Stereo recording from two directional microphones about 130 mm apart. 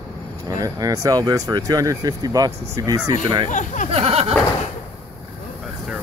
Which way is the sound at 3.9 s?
55° right (ahead or behind).